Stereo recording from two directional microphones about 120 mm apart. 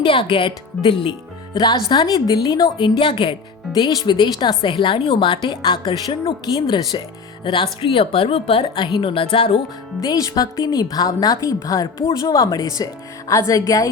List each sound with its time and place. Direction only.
0.0 s a woman's voice: 40° left (ahead or behind)
1.9 s a woman's voice: 35° left (ahead or behind)
10.0 s a woman's voice: 30° left (ahead or behind)